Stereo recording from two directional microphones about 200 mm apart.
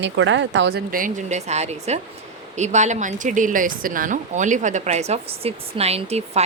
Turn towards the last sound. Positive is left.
turn(degrees=-30)  # may be behind; listen again after turning